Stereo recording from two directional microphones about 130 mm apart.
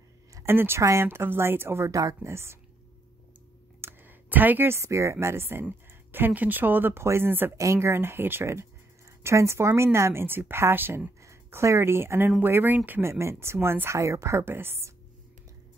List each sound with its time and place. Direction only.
0.3 s speech: 20° right (ahead or behind)
3.8 s speech: 15° right (ahead or behind)